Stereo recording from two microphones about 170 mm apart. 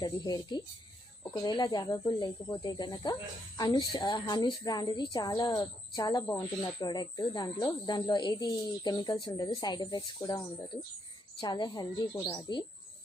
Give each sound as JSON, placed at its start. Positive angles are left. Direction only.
{"t": 0.0, "sound": "a woman's voice", "side_deg": 25}